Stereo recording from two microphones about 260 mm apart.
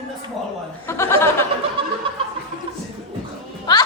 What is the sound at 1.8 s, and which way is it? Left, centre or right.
Snicker, right.